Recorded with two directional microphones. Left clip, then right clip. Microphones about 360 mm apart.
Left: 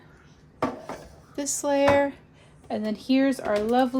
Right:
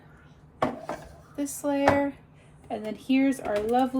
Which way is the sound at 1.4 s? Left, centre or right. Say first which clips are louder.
Left 4 dB; left.